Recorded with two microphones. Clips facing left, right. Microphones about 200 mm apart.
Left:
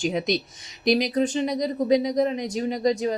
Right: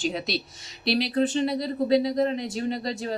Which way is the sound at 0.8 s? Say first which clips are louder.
Left 4 dB; 45° left (ahead or behind).